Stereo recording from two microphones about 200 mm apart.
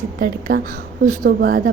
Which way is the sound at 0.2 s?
45° right (ahead or behind).